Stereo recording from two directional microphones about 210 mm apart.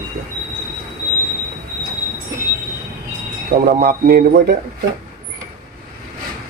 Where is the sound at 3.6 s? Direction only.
45° right (ahead or behind).